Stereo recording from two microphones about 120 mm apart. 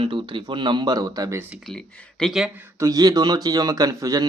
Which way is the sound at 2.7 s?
30° right (ahead or behind).